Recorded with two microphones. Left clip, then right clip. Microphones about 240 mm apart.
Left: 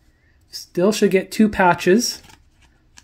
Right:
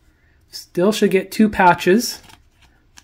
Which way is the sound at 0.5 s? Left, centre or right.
Centre.